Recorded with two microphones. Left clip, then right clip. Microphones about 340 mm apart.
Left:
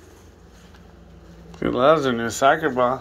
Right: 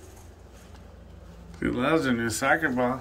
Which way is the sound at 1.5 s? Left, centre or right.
Centre.